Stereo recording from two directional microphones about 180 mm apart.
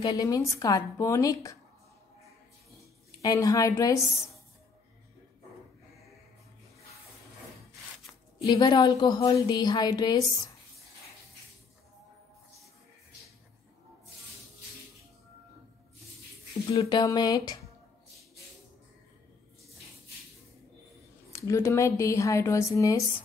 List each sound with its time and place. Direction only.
0.0 s a woman's voice: 20° left (ahead or behind)
3.2 s a woman's voice: 20° left (ahead or behind)
8.4 s a woman's voice: 25° left (ahead or behind)
16.7 s a woman's voice: 25° left (ahead or behind)
21.3 s speech: 15° left (ahead or behind)